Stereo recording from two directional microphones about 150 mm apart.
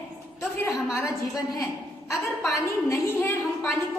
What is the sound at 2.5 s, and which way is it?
A woman's voice, 20° left (ahead or behind).